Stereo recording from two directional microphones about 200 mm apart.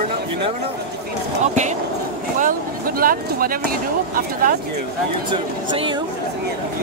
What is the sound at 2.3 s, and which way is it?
Speech, 45° right (ahead or behind).